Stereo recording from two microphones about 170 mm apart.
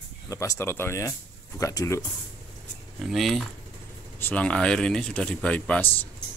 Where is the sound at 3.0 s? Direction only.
Centre (ahead or behind).